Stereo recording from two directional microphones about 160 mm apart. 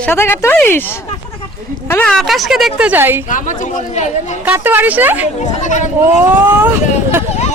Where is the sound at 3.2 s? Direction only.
55° left (ahead or behind).